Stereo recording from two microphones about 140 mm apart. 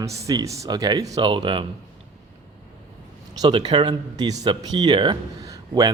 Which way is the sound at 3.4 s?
30° right (ahead or behind).